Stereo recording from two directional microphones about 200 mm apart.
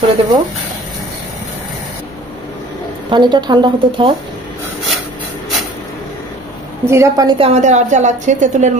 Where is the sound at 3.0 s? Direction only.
20° right (ahead or behind).